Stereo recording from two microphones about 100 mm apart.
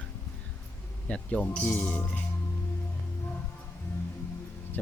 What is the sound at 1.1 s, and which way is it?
Speech, 10° left (ahead or behind).